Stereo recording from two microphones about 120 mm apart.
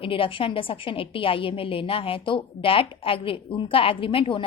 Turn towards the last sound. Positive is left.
turn(degrees=50)  # may be behind; listen again after turning